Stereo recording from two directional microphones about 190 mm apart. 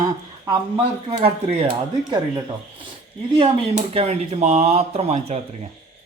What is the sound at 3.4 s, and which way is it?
Speech, 30° right (ahead or behind).